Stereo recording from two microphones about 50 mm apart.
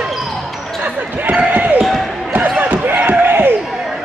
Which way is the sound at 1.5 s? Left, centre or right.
Right.